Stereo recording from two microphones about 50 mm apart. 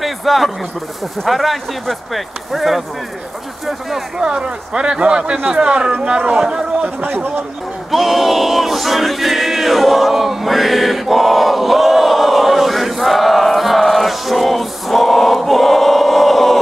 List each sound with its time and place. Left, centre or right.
0.0 s a man's voice: centre
4.2 s speech: centre
7.9 s choir: centre